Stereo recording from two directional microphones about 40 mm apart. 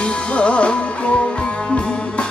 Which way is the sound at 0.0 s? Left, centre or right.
Left.